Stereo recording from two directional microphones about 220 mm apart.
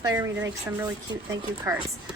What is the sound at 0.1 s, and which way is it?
Speech, 15° right (ahead or behind).